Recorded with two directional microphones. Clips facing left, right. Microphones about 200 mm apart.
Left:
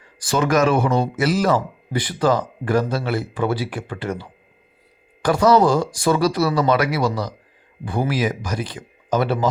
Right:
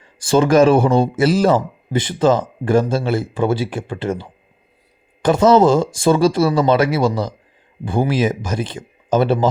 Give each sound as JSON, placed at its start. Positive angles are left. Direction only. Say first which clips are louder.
{"t": 0.0, "sound": "speech", "louder": "right 6 dB", "side_deg": -25}